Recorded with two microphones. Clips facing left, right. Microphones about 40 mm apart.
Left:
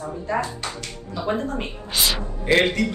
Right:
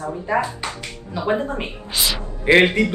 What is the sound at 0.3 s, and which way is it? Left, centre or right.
Speech, centre.